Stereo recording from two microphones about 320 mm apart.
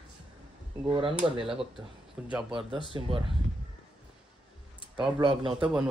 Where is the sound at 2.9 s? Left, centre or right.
Centre.